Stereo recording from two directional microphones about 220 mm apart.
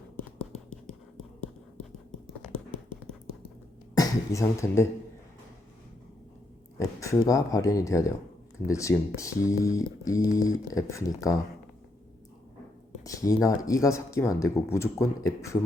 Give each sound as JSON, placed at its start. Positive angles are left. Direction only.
{"t": 0.7, "sound": "whispering", "side_deg": 0}
{"t": 3.9, "sound": "speech", "side_deg": 15}
{"t": 6.7, "sound": "speech", "side_deg": 15}
{"t": 13.1, "sound": "speech", "side_deg": 15}